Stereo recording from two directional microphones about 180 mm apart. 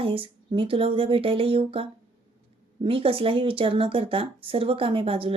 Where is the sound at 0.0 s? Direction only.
30° right (ahead or behind).